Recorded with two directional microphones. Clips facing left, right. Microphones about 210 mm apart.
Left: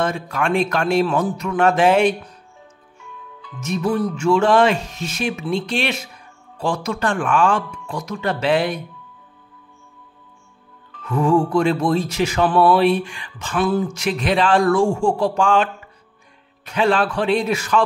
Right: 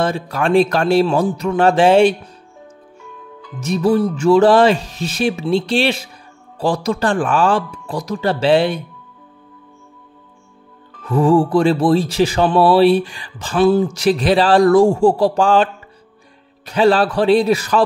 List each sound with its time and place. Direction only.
0.0 s speech: 35° right (ahead or behind)
3.5 s speech: 35° right (ahead or behind)
11.0 s speech: 35° right (ahead or behind)